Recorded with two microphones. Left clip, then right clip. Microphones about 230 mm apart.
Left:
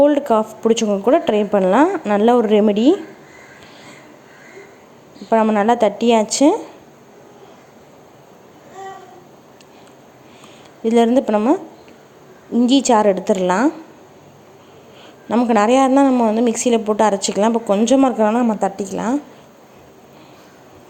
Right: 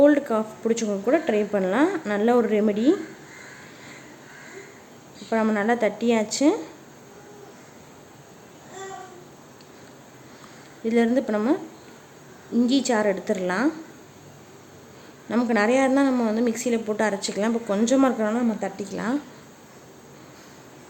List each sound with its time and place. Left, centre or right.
0.0 s a woman's voice: centre
5.3 s a woman's voice: centre
10.8 s a woman's voice: centre
12.6 s a woman's voice: centre
15.3 s a woman's voice: centre